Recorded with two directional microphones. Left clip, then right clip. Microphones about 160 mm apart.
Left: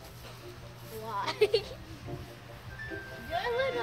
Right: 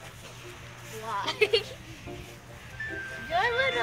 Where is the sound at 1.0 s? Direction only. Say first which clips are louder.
Right 2 dB; 15° left (ahead or behind).